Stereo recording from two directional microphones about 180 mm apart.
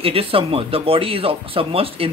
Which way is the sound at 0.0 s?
30° right (ahead or behind).